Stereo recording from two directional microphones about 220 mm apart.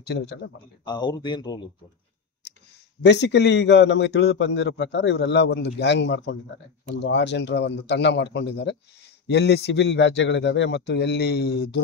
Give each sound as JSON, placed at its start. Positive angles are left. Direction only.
{"t": 0.0, "sound": "a man's voice", "side_deg": 50}
{"t": 0.8, "sound": "speech", "side_deg": 20}
{"t": 3.0, "sound": "a man's voice", "side_deg": 50}